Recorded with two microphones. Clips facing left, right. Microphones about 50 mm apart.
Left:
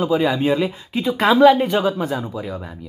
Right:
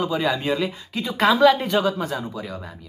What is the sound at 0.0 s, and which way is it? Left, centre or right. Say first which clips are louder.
Speech: left 5 dB; centre.